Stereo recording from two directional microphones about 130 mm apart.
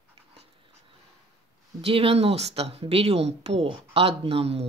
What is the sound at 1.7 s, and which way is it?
Speech, 45° right (ahead or behind).